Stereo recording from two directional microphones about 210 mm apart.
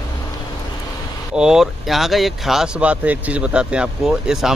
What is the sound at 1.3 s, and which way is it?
Speech, 5° right (ahead or behind).